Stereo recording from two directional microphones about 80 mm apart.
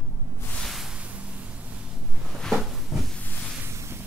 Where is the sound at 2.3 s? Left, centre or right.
Centre.